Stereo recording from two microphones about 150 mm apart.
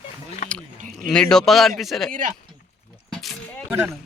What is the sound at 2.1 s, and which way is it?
Speech, 60° right (ahead or behind).